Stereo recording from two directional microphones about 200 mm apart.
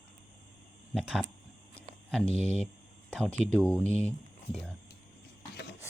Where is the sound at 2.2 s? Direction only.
30° left (ahead or behind).